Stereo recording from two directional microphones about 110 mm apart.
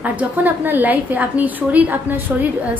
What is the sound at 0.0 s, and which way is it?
A woman's voice, 15° right (ahead or behind).